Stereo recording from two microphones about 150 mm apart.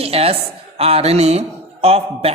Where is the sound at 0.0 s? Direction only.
45° right (ahead or behind).